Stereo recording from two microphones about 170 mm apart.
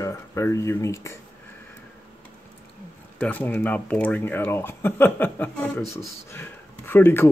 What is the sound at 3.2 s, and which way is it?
Speech, 10° left (ahead or behind).